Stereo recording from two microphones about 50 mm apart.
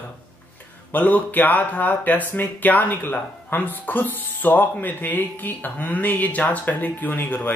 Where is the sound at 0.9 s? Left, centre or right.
Left.